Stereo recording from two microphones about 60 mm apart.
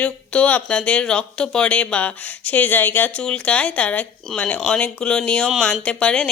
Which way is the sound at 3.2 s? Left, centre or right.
Centre.